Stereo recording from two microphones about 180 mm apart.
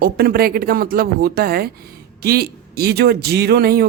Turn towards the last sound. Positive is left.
turn(degrees=-60)  # may be behind; listen again after turning